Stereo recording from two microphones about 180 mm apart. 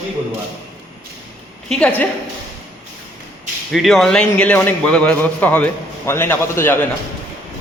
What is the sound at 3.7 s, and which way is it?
A man's voice, centre (ahead or behind).